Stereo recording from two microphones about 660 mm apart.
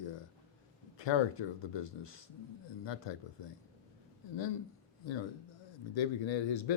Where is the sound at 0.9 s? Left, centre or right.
Left.